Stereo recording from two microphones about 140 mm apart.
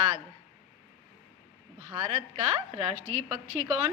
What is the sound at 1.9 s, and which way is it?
Speech, 35° right (ahead or behind).